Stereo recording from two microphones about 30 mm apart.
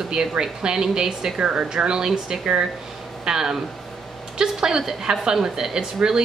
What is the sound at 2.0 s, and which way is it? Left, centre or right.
Speech, right.